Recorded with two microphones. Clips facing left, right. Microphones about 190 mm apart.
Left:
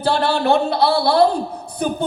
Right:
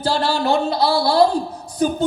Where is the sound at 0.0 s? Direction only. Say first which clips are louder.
Left 2 dB; 60° left (ahead or behind).